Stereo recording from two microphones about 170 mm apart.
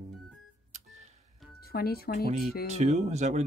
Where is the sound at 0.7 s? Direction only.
45° right (ahead or behind).